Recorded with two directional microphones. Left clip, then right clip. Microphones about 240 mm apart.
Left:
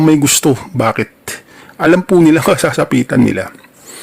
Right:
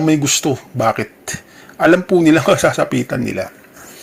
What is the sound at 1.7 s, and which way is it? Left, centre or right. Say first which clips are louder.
Speech: left 1 dB; left.